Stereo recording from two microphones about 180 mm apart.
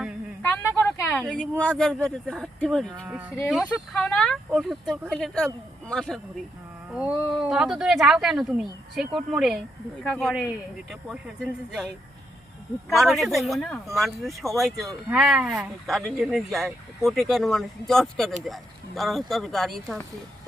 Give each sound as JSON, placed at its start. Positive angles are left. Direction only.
{"t": 0.4, "sound": "a sound", "side_deg": 10}
{"t": 1.7, "sound": "speech", "side_deg": -5}
{"t": 12.9, "sound": "speech", "side_deg": 0}